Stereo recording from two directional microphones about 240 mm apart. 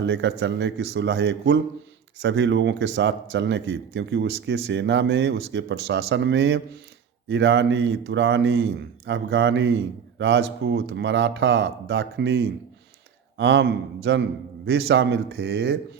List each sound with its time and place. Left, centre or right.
0.0 s speech: right